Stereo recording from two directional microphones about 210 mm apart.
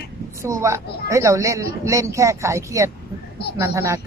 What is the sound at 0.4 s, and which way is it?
Speech, 15° right (ahead or behind).